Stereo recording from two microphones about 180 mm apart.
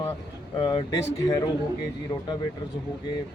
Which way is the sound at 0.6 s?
30° left (ahead or behind).